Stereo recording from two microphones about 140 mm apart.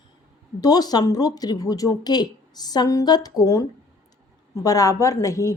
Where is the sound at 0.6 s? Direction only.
30° left (ahead or behind).